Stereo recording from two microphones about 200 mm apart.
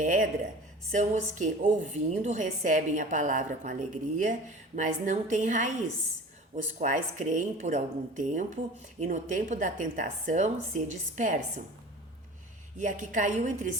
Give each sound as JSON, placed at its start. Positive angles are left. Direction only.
{"t": 0.0, "sound": "a sound", "side_deg": -40}
{"t": 0.9, "sound": "a woman's voice", "side_deg": -40}
{"t": 6.7, "sound": "a woman's voice", "side_deg": -40}
{"t": 12.8, "sound": "a woman's voice", "side_deg": -40}